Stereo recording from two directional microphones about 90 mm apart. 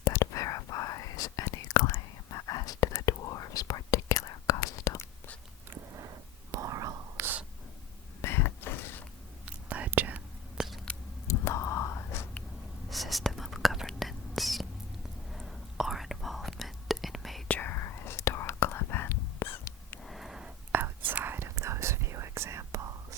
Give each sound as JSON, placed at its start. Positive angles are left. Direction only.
{"t": 0.0, "sound": "whispering", "side_deg": 35}
{"t": 5.7, "sound": "a sound", "side_deg": -30}
{"t": 6.5, "sound": "whispering", "side_deg": -40}
{"t": 8.2, "sound": "a sound", "side_deg": 25}
{"t": 9.6, "sound": "whispering", "side_deg": -15}
{"t": 10.6, "sound": "a sound", "side_deg": -10}
{"t": 11.3, "sound": "whispering", "side_deg": 30}
{"t": 12.9, "sound": "whispering", "side_deg": 0}
{"t": 17.5, "sound": "whispering", "side_deg": 20}
{"t": 17.7, "sound": "whispering", "side_deg": 30}
{"t": 20.0, "sound": "a sound", "side_deg": 0}
{"t": 20.7, "sound": "whispering", "side_deg": -20}